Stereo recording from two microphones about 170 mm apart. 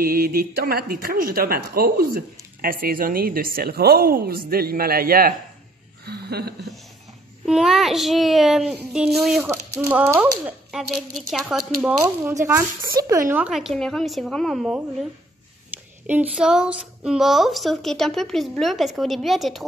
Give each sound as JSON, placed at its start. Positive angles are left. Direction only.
{"t": 0.0, "sound": "speech", "side_deg": -60}
{"t": 6.0, "sound": "a sound", "side_deg": -70}
{"t": 7.4, "sound": "speech", "side_deg": 0}
{"t": 9.8, "sound": "speech", "side_deg": -10}
{"t": 10.4, "sound": "speech", "side_deg": 0}
{"t": 12.0, "sound": "speech", "side_deg": -20}
{"t": 13.5, "sound": "speech", "side_deg": 0}
{"t": 16.1, "sound": "speech", "side_deg": -5}